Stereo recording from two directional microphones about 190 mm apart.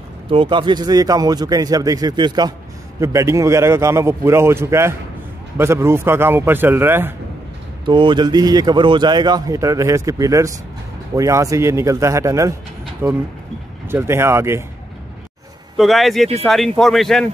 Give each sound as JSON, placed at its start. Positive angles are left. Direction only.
{"t": 0.3, "sound": "a man's voice", "side_deg": -25}
{"t": 7.8, "sound": "a man's voice", "side_deg": -25}
{"t": 15.8, "sound": "speech", "side_deg": 0}